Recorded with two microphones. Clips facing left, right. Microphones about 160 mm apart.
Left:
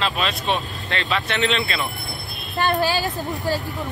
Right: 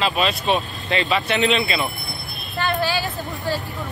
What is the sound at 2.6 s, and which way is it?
Speech, 40° left (ahead or behind).